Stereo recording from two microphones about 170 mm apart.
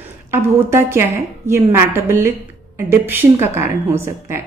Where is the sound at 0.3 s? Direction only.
15° right (ahead or behind).